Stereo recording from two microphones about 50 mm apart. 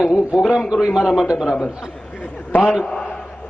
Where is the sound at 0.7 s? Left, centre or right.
Centre.